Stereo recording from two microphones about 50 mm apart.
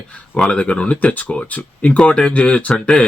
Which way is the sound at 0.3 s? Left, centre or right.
Centre.